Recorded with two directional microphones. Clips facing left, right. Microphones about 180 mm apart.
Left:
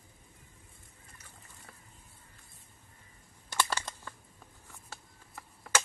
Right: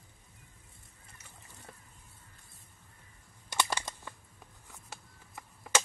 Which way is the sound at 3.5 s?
15° right (ahead or behind).